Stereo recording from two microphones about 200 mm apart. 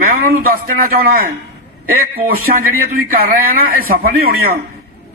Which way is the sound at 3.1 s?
50° right (ahead or behind).